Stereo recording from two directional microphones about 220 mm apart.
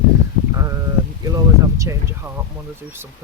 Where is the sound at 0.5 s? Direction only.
15° right (ahead or behind).